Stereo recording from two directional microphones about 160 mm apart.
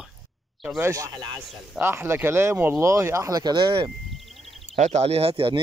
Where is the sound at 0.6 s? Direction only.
15° right (ahead or behind); by 3.9 s 30° right (ahead or behind).